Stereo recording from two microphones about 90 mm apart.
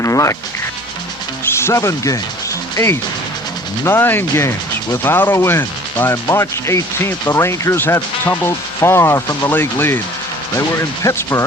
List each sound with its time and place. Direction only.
0.0 s insect: 35° left (ahead or behind)
1.5 s speech: 30° left (ahead or behind)
3.8 s speech: 25° left (ahead or behind)
11.0 s speech: 35° left (ahead or behind)